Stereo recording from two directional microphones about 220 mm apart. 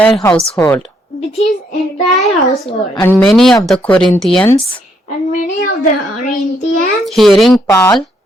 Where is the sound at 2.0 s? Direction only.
Centre (ahead or behind).